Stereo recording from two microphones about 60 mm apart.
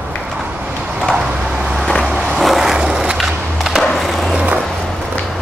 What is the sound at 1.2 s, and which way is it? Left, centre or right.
Vehicle, centre.